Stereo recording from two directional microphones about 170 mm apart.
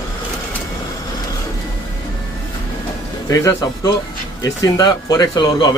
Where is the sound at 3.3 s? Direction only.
20° left (ahead or behind).